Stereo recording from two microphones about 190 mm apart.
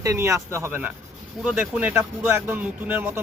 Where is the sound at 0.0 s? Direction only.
15° right (ahead or behind).